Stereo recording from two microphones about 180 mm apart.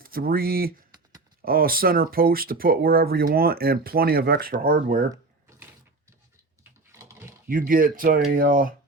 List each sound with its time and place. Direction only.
0.0 s speech: 55° right (ahead or behind)
7.4 s speech: 50° right (ahead or behind)